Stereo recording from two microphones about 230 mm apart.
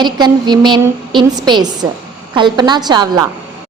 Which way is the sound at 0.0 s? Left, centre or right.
Centre.